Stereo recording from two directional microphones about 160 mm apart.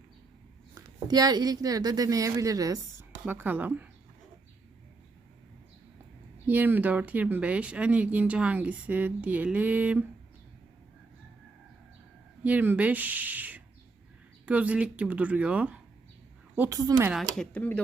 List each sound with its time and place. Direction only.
0.7 s a woman's voice: 25° right (ahead or behind)
6.5 s speech: 10° right (ahead or behind)
12.4 s speech: 10° right (ahead or behind)
16.6 s a woman's voice: 20° right (ahead or behind)
17.3 s speech: 5° left (ahead or behind)